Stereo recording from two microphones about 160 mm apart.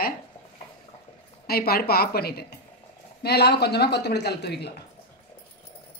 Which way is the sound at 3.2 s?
90° left.